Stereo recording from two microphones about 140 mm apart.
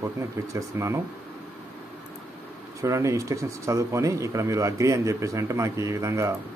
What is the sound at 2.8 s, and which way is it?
Speech, 20° right (ahead or behind).